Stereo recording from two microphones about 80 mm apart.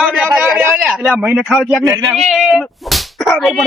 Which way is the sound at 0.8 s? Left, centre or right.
Centre.